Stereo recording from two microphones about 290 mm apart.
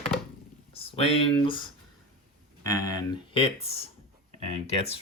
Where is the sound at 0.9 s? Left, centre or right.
Centre.